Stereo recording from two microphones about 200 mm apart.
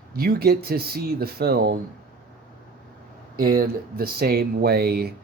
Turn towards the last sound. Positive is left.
turn(degrees=-50)  # may be behind; listen again after turning